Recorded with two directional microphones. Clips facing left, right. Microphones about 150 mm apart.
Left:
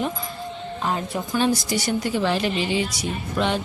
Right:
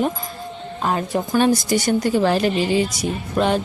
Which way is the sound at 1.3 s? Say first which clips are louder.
Right 4 dB; 50° right (ahead or behind).